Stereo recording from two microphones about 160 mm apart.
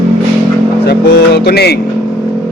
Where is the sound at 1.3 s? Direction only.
90° left.